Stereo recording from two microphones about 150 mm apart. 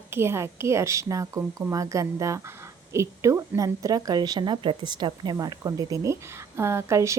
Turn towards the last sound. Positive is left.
turn(degrees=-20)  # may be behind; listen again after turning